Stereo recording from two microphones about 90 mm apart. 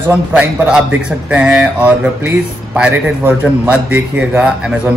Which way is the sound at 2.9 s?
25° right (ahead or behind).